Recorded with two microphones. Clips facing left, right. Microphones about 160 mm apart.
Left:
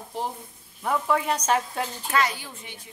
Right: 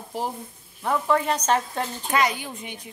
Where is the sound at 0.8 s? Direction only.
10° left (ahead or behind).